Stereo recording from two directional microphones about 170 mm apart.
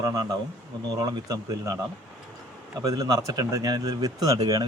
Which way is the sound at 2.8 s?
20° right (ahead or behind).